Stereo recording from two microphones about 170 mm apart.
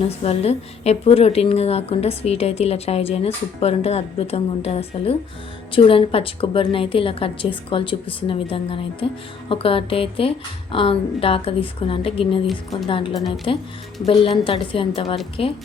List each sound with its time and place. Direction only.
0.2 s a woman's voice: 35° left (ahead or behind)
13.1 s a woman's voice: centre (ahead or behind)
14.0 s a woman's voice: 35° left (ahead or behind)